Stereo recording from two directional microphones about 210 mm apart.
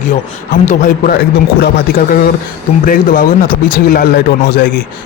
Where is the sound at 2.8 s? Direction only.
45° left (ahead or behind).